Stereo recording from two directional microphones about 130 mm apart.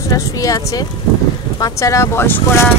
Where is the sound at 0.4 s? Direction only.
25° left (ahead or behind).